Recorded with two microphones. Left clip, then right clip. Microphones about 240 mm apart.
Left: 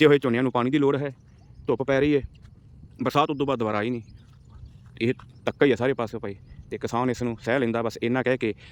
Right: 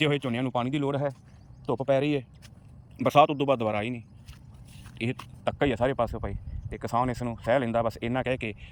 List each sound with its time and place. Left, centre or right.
0.0 s speech: centre